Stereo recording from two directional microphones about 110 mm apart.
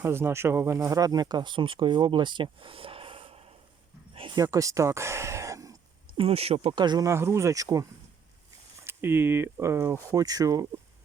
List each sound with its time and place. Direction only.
0.0 s speech: 20° right (ahead or behind); by 3.5 s 60° right (ahead or behind)
4.1 s a sound: 55° right (ahead or behind)
4.4 s speech: 30° right (ahead or behind)
6.1 s speech: 60° right (ahead or behind)
6.8 s speech: 40° right (ahead or behind)
7.1 s speech: 25° right (ahead or behind)
8.8 s speech: 20° right (ahead or behind)